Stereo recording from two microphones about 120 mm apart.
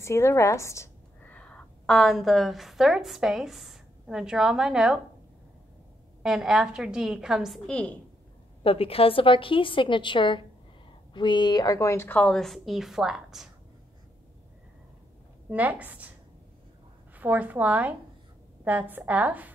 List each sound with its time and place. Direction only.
0.0 s a woman's voice: 25° left (ahead or behind)
1.3 s a woman's voice: 10° left (ahead or behind); by 5.0 s 5° right (ahead or behind)
6.2 s a woman's voice: 5° right (ahead or behind)
8.6 s a woman's voice: 50° left (ahead or behind); by 12.2 s 20° left (ahead or behind)
12.2 s a woman's voice: 5° left (ahead or behind)
15.5 s a woman's voice: 15° right (ahead or behind)
17.1 s a woman's voice: 15° right (ahead or behind)